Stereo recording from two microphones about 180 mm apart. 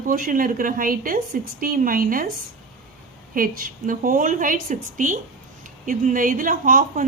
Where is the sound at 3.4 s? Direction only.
50° right (ahead or behind).